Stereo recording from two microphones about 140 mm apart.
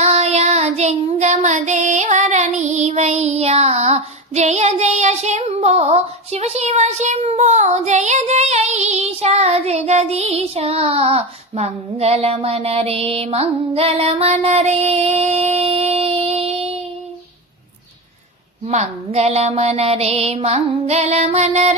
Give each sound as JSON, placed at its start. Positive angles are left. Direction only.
{"t": 0.0, "sound": "child singing", "side_deg": -50}
{"t": 18.7, "sound": "mantra", "side_deg": -50}